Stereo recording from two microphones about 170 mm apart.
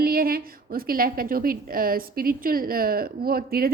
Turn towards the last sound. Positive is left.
turn(degrees=-60)  # may be behind; listen again after turning